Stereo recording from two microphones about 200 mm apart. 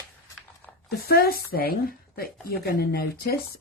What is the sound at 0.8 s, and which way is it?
Speech, 50° left (ahead or behind).